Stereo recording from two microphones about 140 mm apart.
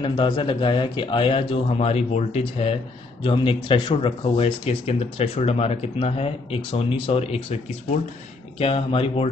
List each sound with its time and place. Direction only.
0.0 s speech: 35° left (ahead or behind)
3.3 s speech: 40° left (ahead or behind)
8.5 s speech: 45° left (ahead or behind)